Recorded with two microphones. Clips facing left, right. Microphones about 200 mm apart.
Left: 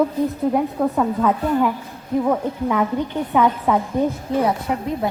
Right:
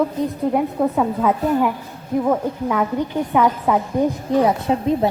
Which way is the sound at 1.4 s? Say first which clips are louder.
Right 2 dB; 20° right (ahead or behind).